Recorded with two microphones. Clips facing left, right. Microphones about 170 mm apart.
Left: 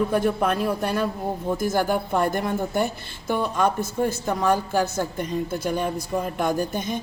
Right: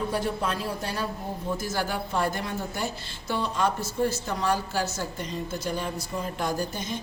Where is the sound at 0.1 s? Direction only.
55° left (ahead or behind).